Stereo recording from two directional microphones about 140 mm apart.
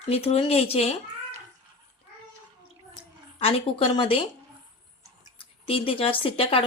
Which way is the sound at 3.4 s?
45° left (ahead or behind).